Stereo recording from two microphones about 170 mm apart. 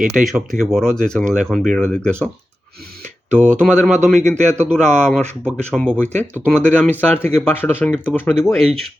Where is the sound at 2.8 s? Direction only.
65° right (ahead or behind).